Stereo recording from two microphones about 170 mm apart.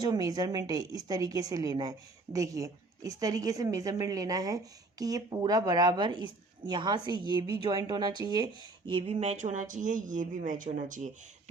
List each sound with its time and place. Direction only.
0.0 s a woman's voice: 25° right (ahead or behind); by 11.1 s 45° right (ahead or behind)